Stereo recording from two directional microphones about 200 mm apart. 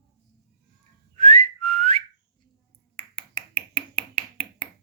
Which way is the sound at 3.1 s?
25° left (ahead or behind).